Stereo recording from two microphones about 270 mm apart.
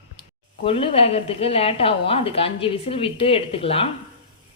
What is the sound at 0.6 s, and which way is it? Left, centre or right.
A woman's voice, centre.